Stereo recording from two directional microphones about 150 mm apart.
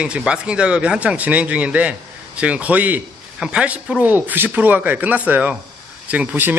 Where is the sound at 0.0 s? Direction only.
5° right (ahead or behind).